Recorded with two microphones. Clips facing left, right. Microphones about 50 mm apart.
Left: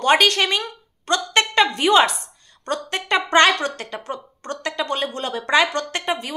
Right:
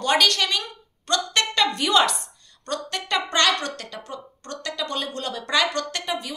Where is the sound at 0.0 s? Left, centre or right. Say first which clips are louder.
Left 4 dB; left.